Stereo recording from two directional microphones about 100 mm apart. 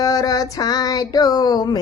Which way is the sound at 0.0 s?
40° left (ahead or behind).